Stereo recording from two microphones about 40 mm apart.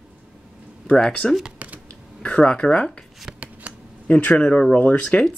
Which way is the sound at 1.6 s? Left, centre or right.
Right.